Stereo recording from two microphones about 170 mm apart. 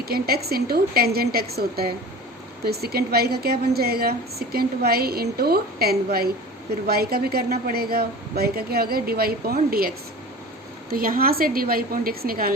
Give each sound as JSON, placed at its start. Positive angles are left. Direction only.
{"t": 0.0, "sound": "a woman's voice", "side_deg": -65}